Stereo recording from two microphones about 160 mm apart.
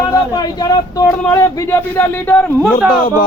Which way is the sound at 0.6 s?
25° left (ahead or behind).